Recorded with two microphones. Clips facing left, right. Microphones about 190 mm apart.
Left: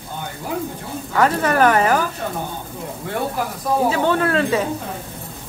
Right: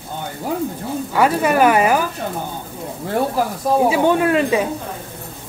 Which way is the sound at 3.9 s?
15° right (ahead or behind).